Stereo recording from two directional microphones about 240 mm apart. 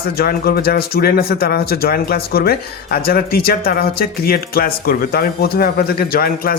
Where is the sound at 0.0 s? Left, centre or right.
Left.